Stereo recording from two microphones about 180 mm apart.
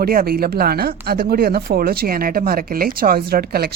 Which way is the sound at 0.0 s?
55° right (ahead or behind).